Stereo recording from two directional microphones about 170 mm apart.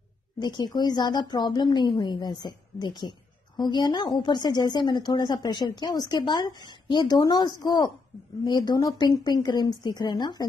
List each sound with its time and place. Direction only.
0.4 s a woman's voice: 25° left (ahead or behind)